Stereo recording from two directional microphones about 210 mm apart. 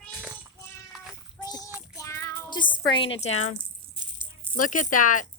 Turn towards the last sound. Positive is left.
turn(degrees=40)  # may be behind; listen again after turning